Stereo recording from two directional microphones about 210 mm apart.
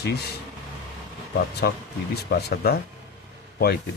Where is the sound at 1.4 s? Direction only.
50° left (ahead or behind).